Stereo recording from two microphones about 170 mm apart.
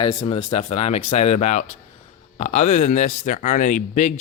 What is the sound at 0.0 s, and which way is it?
Speech, 35° left (ahead or behind).